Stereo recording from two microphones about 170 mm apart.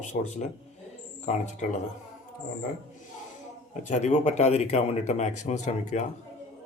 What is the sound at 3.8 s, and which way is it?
Speech, 45° left (ahead or behind).